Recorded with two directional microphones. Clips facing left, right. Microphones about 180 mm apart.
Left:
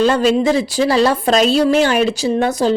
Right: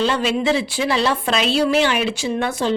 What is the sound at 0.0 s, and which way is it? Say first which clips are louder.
A woman's voice: left 6 dB; 40° left (ahead or behind).